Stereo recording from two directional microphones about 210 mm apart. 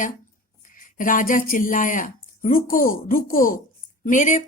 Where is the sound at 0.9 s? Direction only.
40° left (ahead or behind).